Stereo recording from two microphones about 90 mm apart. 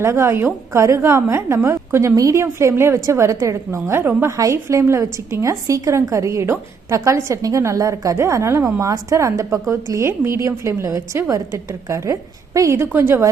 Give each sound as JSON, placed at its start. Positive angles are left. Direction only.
{"t": 0.0, "sound": "a woman's voice", "side_deg": -30}
{"t": 12.7, "sound": "a woman's voice", "side_deg": -25}